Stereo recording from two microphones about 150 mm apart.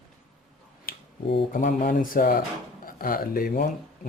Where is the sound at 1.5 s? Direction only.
65° left (ahead or behind).